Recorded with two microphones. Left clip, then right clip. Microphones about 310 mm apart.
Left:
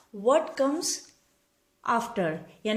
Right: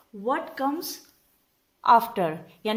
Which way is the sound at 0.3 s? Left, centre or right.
Centre.